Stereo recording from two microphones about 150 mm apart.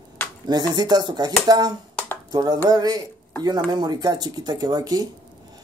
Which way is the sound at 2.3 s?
25° right (ahead or behind).